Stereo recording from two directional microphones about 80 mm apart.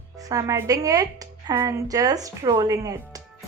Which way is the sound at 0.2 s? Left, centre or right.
Right.